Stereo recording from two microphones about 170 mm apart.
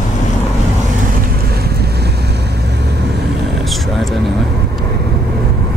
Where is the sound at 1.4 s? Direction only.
70° right (ahead or behind).